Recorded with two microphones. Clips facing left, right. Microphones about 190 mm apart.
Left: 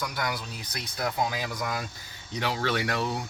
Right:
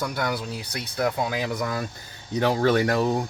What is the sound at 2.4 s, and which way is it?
Speech, 45° right (ahead or behind).